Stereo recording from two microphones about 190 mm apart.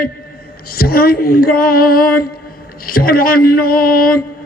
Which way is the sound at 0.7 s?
50° left (ahead or behind).